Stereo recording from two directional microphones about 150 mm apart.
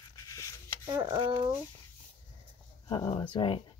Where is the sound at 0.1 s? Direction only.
20° left (ahead or behind).